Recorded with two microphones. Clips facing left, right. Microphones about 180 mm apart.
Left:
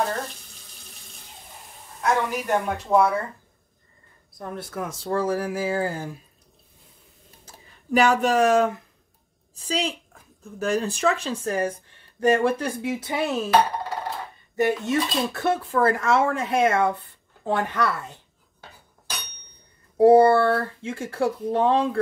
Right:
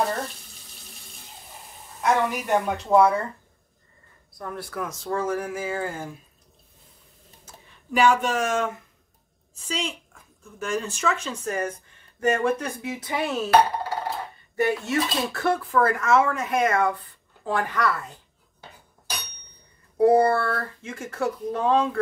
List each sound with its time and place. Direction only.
2.0 s speech: centre (ahead or behind)
4.4 s speech: 25° left (ahead or behind)
7.4 s speech: 40° left (ahead or behind)
14.5 s speech: 20° left (ahead or behind)
20.0 s speech: 30° left (ahead or behind)